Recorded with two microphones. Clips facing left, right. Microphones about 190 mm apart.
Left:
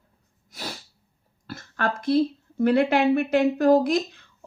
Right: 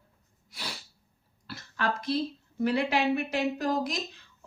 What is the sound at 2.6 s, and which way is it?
Speech, 55° left (ahead or behind).